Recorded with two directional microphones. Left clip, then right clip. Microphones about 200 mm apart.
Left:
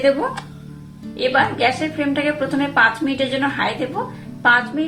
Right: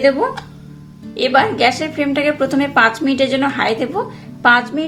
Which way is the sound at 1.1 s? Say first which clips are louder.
Right 3 dB; 40° right (ahead or behind).